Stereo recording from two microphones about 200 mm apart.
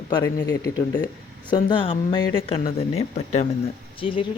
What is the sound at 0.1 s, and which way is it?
A woman's voice, 20° left (ahead or behind).